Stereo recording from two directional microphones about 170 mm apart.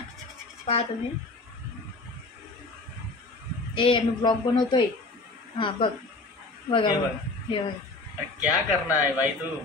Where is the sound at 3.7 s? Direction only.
30° left (ahead or behind).